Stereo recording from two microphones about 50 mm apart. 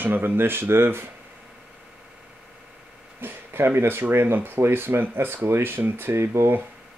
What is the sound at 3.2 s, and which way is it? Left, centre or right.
Speech, right.